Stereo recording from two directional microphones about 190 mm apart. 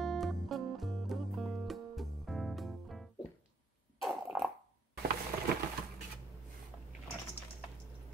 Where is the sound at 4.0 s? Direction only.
Centre (ahead or behind).